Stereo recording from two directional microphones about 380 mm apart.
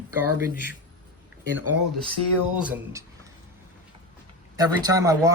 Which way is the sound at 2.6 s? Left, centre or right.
Centre.